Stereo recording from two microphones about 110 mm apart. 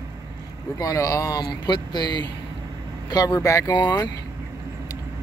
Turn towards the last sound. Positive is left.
turn(degrees=35)  # may be behind; listen again after turning